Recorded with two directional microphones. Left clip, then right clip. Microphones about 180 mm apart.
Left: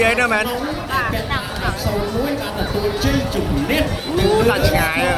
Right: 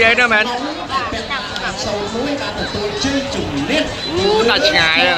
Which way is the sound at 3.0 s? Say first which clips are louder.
Right 1 dB; 30° right (ahead or behind).